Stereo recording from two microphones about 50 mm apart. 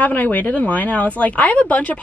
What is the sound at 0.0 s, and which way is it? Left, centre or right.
A woman's voice, left.